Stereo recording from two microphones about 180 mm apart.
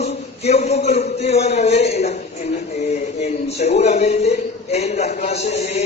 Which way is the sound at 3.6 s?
40° left (ahead or behind).